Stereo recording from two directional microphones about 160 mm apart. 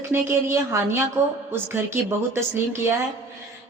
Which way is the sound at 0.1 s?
15° right (ahead or behind).